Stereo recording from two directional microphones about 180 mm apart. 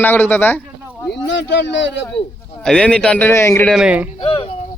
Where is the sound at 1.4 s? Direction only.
80° left.